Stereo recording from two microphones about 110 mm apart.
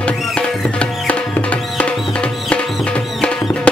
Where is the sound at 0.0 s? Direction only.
10° left (ahead or behind).